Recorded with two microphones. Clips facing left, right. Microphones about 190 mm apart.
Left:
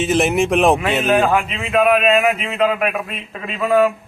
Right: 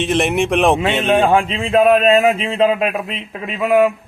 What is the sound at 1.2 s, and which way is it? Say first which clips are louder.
A man's voice: right 3 dB; 30° right (ahead or behind).